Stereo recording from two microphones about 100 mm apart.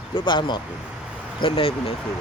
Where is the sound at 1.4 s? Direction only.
70° left (ahead or behind).